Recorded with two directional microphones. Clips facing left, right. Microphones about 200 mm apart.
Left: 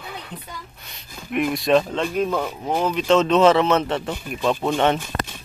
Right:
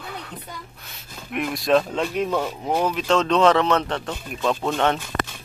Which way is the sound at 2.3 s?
5° right (ahead or behind).